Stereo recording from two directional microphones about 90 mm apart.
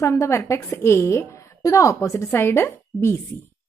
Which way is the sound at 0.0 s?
30° left (ahead or behind).